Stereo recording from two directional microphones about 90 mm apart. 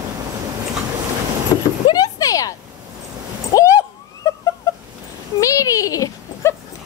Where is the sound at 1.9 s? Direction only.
45° left (ahead or behind).